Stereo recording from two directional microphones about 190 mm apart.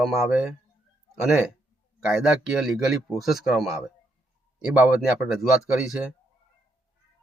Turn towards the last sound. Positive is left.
turn(degrees=-5)  # may be behind; listen again after turning